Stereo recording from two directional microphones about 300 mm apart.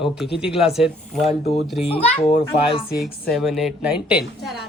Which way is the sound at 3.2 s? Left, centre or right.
Centre.